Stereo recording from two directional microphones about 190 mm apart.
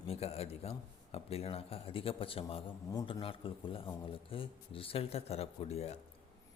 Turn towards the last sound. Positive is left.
turn(degrees=35)  # may be behind; listen again after turning